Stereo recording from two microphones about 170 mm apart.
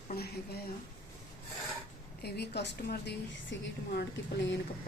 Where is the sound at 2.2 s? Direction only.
75° left (ahead or behind).